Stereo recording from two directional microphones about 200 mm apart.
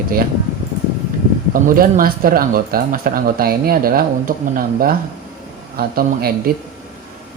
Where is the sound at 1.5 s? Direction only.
45° right (ahead or behind).